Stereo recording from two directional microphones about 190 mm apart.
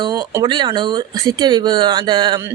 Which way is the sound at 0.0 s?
20° right (ahead or behind).